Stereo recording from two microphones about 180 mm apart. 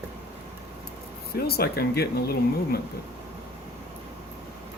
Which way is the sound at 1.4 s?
60° left (ahead or behind).